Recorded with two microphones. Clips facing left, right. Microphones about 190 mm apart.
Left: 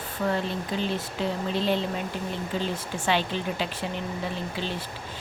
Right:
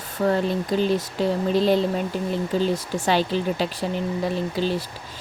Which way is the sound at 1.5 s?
40° right (ahead or behind).